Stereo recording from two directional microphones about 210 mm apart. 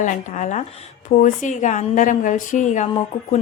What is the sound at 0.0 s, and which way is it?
A woman's voice, 35° left (ahead or behind).